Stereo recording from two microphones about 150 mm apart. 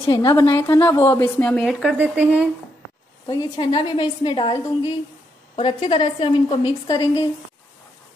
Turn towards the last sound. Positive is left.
turn(degrees=25)  # may be behind; listen again after turning